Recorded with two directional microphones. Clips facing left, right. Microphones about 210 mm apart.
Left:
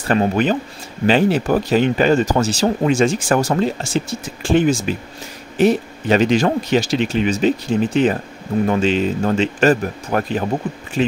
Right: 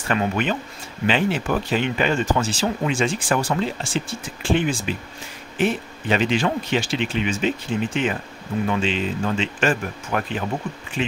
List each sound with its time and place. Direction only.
0.1 s speech: 35° left (ahead or behind)